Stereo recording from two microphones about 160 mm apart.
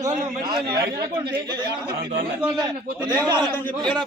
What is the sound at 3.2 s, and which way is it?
Speech, 25° right (ahead or behind).